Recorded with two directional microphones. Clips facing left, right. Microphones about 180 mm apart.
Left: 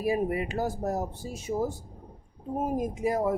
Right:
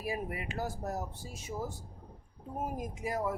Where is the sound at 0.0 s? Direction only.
30° left (ahead or behind).